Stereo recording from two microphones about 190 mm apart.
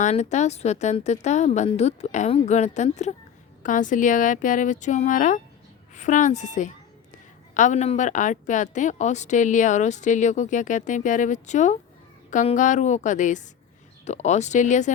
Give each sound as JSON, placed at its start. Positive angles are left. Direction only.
{"t": 0.0, "sound": "a woman's voice", "side_deg": 40}